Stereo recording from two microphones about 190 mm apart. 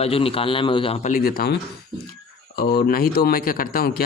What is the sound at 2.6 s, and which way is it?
Speech, 50° left (ahead or behind).